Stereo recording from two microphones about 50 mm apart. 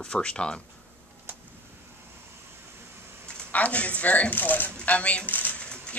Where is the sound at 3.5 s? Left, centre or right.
Left.